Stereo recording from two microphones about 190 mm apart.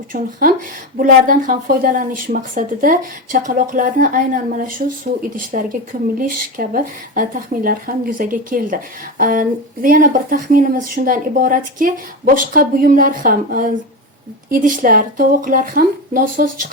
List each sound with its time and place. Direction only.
0.1 s speech: 50° right (ahead or behind)